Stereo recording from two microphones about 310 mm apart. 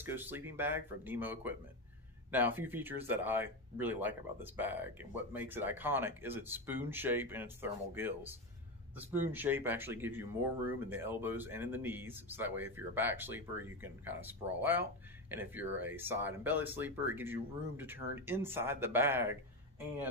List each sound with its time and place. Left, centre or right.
0.0 s speech: centre